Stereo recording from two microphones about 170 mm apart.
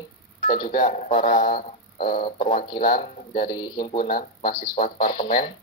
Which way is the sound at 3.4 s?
25° left (ahead or behind).